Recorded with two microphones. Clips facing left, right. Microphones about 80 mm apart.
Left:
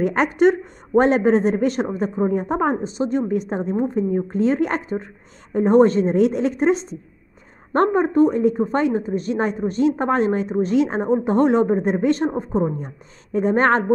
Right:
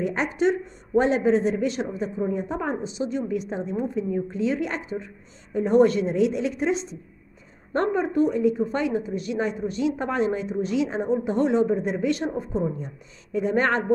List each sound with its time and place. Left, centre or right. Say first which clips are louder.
0.0 s a woman's voice: left 7 dB; left